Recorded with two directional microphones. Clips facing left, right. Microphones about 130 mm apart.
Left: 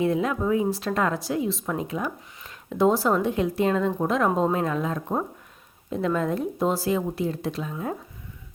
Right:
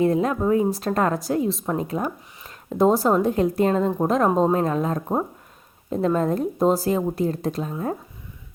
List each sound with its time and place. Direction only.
0.0 s speech: 40° right (ahead or behind)